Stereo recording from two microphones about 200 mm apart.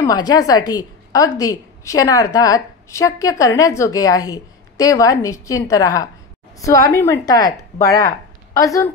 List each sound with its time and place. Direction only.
0.0 s a woman's voice: 20° left (ahead or behind)